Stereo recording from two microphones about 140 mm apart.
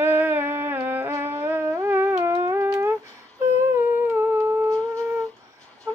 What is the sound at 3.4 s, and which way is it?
Humming, 20° right (ahead or behind).